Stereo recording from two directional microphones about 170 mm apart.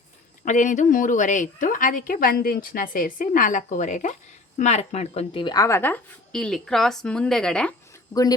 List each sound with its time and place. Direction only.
0.4 s a woman's voice: 50° left (ahead or behind); by 7.7 s 5° left (ahead or behind)